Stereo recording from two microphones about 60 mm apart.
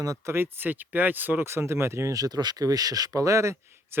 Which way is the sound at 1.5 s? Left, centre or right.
Right.